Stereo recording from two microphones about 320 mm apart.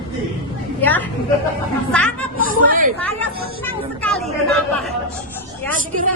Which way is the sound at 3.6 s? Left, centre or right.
Centre.